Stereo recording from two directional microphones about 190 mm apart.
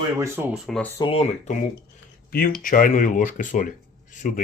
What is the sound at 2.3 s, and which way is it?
Speech, 50° left (ahead or behind).